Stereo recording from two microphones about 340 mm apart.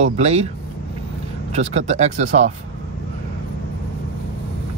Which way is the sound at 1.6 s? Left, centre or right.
Centre.